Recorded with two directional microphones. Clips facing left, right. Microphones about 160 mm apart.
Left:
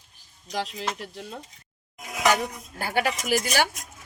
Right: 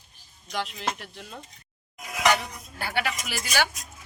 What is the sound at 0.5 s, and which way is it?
Speech, 35° left (ahead or behind).